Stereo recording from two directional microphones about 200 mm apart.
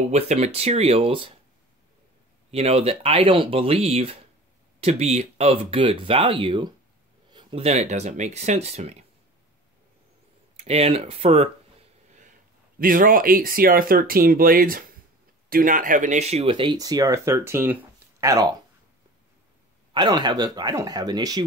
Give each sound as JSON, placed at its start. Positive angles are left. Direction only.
{"t": 0.1, "sound": "speech", "side_deg": -30}
{"t": 2.5, "sound": "speech", "side_deg": -30}
{"t": 10.5, "sound": "speech", "side_deg": -30}
{"t": 19.9, "sound": "speech", "side_deg": -20}